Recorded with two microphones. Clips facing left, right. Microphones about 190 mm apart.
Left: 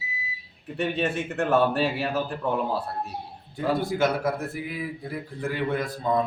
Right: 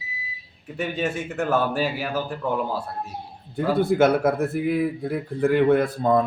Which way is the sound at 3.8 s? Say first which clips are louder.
Right 10 dB; 55° right (ahead or behind).